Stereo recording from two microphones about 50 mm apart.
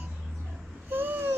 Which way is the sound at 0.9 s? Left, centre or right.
Right.